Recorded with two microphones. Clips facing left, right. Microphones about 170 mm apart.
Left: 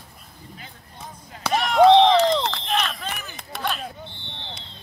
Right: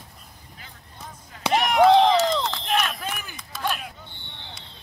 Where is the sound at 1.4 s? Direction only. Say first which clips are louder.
Right 1 dB; 15° right (ahead or behind).